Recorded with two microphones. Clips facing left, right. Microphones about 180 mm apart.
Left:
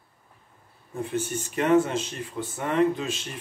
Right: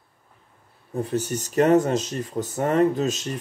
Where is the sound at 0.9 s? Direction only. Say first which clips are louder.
Right 3 dB; 40° right (ahead or behind).